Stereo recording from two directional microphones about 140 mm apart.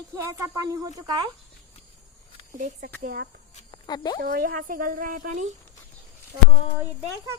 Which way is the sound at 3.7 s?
30° left (ahead or behind).